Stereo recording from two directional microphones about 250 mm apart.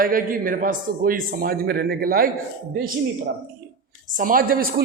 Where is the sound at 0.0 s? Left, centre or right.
Right.